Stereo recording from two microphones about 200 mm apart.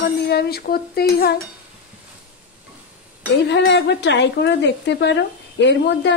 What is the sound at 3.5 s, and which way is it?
Speech, 60° left (ahead or behind).